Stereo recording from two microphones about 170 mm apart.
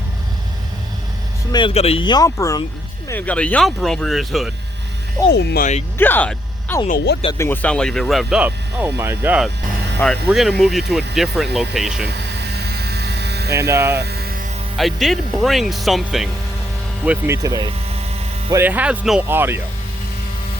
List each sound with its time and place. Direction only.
1.5 s speech: 35° left (ahead or behind); by 2.6 s 20° left (ahead or behind)
3.1 s speech: 10° left (ahead or behind)
5.3 s speech: 85° left
6.0 s speech: 10° left (ahead or behind)
12.0 s a sound: 70° right (ahead or behind)
13.7 s speech: 15° right (ahead or behind)
14.0 s music: 70° right (ahead or behind)
14.8 s speech: centre (ahead or behind)
17.1 s speech: 15° right (ahead or behind)